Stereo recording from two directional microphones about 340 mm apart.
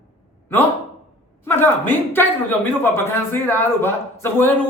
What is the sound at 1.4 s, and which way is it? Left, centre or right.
A man's voice, centre.